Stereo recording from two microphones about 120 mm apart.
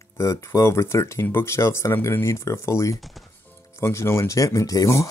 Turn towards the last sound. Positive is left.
turn(degrees=25)  # may be behind; listen again after turning